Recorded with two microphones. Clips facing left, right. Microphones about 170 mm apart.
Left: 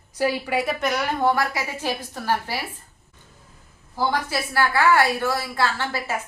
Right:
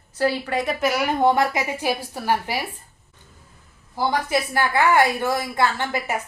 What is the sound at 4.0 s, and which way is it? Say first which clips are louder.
A woman's voice: right 2 dB; 20° right (ahead or behind).